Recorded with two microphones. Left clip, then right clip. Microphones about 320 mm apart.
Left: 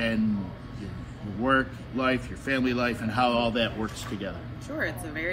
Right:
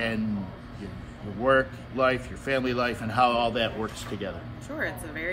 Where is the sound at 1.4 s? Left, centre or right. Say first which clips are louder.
Right 2 dB; right.